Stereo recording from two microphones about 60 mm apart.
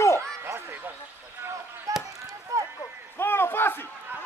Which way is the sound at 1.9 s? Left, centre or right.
Right.